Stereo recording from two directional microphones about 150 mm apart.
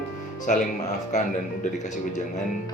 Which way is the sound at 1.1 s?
55° left (ahead or behind).